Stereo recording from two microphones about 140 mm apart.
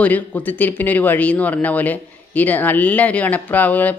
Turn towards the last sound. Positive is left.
turn(degrees=10)  # may be behind; listen again after turning